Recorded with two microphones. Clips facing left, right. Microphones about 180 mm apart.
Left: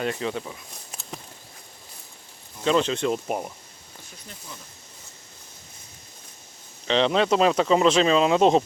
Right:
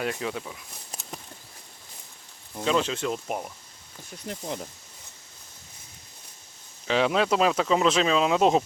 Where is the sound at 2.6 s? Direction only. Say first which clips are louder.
Left 3 dB; 5° right (ahead or behind).